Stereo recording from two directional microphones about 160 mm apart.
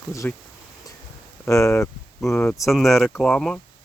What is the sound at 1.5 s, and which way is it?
Speech, 20° left (ahead or behind).